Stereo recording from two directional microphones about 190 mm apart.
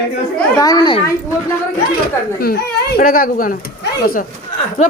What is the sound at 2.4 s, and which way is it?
Speech, 55° left (ahead or behind).